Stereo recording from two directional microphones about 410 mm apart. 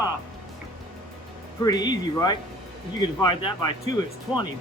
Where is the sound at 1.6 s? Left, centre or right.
Centre.